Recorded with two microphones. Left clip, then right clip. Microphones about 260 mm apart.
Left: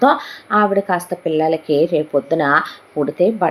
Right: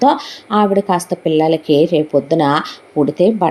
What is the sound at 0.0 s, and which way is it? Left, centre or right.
Speech, right.